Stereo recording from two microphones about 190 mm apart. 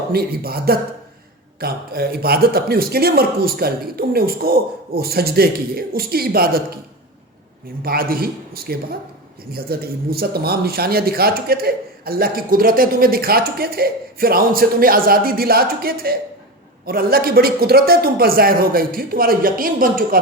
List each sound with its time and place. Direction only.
0.1 s speech: 55° right (ahead or behind)
7.8 s speech: 50° right (ahead or behind)